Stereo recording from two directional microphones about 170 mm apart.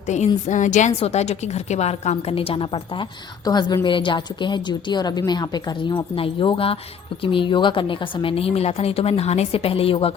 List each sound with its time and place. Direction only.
0.1 s a woman's voice: 45° left (ahead or behind)